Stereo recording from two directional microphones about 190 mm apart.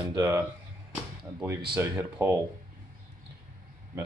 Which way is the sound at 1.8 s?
15° right (ahead or behind).